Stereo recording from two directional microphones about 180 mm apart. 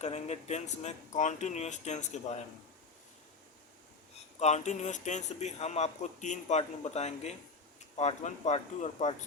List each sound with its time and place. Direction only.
0.0 s a man's voice: 40° left (ahead or behind)
4.4 s a man's voice: 40° left (ahead or behind)